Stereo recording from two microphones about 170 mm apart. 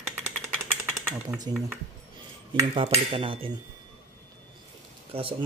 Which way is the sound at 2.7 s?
30° right (ahead or behind).